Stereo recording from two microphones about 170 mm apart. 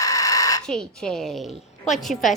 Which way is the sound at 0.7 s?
5° left (ahead or behind).